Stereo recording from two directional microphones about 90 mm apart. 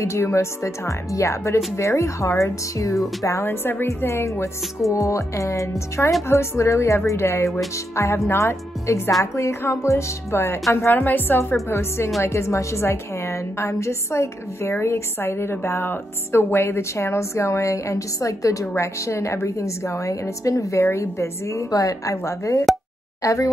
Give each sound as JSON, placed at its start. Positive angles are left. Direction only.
{"t": 0.0, "sound": "a woman's voice", "side_deg": 30}
{"t": 12.2, "sound": "a woman's voice", "side_deg": 30}